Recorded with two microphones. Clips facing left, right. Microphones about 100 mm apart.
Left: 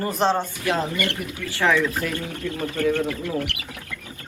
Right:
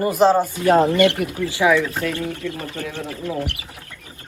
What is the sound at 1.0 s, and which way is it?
Speech, 70° right (ahead or behind).